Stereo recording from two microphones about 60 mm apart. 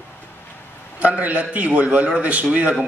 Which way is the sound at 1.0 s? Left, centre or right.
Right.